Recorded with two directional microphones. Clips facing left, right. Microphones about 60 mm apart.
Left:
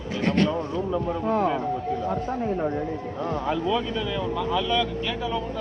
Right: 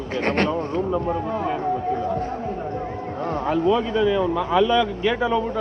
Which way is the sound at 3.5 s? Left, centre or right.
Right.